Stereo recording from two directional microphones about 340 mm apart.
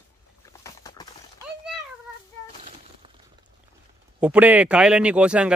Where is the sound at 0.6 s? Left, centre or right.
Centre.